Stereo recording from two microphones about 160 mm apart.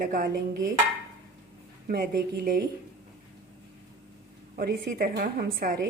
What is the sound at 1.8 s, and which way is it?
Speech, 70° right (ahead or behind).